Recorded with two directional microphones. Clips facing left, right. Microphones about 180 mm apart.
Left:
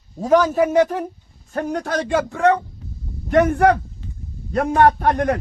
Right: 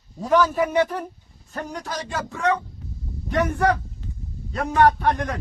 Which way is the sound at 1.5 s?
55° left (ahead or behind).